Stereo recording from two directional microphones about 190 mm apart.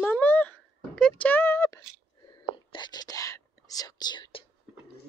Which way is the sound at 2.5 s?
25° left (ahead or behind).